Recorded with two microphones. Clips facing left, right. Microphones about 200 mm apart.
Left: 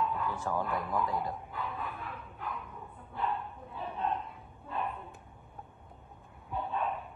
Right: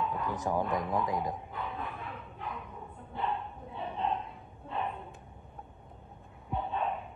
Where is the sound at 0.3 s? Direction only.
15° right (ahead or behind).